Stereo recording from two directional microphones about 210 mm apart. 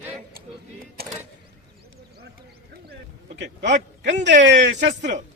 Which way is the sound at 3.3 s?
55° right (ahead or behind).